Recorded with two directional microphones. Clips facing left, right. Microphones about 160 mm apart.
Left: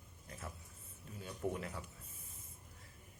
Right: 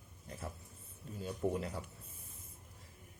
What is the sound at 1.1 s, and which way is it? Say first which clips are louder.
Speech: right 4 dB; 35° right (ahead or behind).